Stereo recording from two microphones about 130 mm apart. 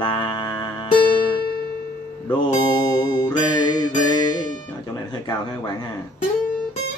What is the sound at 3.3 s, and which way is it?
Music, 30° left (ahead or behind).